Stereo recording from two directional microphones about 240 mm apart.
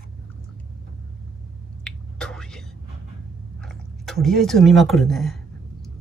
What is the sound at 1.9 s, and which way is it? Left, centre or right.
Whispering, centre.